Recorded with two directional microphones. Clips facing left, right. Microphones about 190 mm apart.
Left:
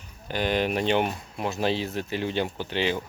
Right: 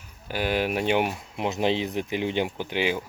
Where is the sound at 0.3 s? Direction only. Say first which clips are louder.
Even; 5° right (ahead or behind).